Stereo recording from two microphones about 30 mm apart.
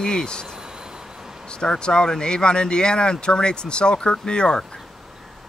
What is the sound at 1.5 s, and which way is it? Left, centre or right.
Speech, left.